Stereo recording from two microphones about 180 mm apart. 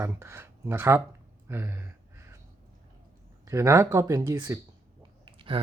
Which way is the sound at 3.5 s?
15° right (ahead or behind).